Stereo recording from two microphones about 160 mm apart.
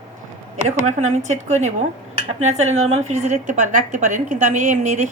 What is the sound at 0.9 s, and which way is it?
A woman's voice, 45° right (ahead or behind).